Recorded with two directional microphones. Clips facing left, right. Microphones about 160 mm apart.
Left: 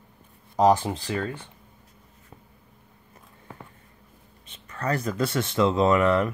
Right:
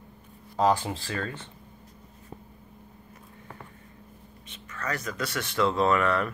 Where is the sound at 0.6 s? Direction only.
20° left (ahead or behind).